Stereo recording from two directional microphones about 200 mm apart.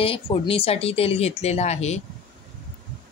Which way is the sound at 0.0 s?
30° left (ahead or behind).